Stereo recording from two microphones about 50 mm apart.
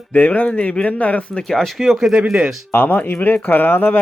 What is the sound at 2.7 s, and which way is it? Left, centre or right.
Speech, left.